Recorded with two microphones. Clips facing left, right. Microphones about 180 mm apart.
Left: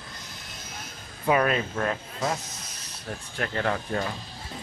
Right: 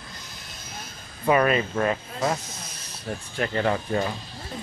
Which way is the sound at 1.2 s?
Centre (ahead or behind).